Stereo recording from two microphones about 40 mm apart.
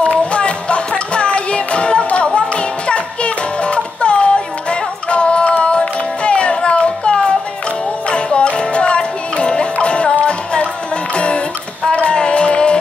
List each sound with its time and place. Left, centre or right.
0.0 s music: left